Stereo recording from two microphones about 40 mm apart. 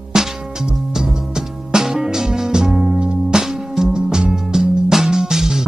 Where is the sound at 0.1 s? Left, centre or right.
Centre.